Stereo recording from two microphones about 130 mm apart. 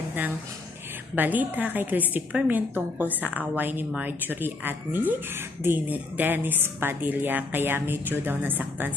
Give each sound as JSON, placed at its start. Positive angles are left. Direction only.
{"t": 1.1, "sound": "a woman's voice", "side_deg": -15}